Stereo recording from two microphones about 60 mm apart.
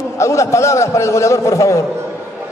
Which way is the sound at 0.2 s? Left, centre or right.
Left.